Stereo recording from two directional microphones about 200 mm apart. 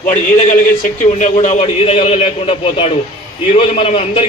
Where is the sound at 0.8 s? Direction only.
40° left (ahead or behind).